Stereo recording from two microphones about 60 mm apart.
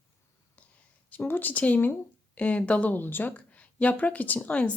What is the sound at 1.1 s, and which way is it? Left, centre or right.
Speech, left.